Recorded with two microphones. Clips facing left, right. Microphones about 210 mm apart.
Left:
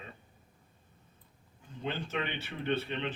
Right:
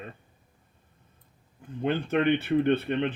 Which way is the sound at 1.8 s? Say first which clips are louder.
Right 11 dB; 55° right (ahead or behind).